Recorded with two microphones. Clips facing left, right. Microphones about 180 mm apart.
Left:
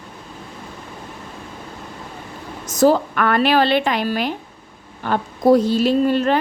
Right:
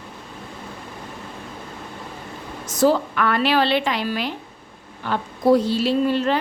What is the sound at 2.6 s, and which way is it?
A woman's voice, 45° left (ahead or behind).